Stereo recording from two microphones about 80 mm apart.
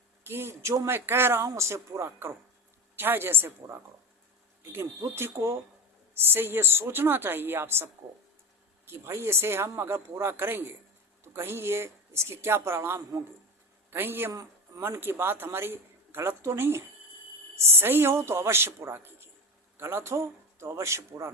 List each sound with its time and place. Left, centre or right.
0.3 s a woman's voice: right
8.9 s a woman's voice: right